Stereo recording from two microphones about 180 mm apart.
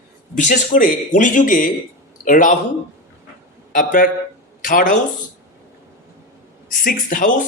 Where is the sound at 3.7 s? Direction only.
50° left (ahead or behind).